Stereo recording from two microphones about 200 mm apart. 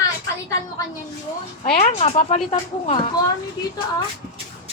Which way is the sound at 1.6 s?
40° left (ahead or behind).